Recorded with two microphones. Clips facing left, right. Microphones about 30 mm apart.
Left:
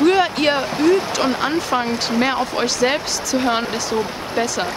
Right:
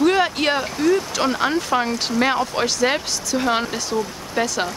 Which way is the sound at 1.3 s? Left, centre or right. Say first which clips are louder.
Even; centre.